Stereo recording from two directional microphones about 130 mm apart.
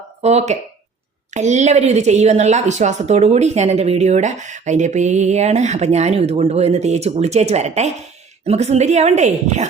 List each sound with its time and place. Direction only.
0.2 s speech: 55° right (ahead or behind)